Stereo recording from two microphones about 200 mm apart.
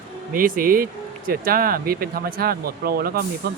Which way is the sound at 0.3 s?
45° right (ahead or behind).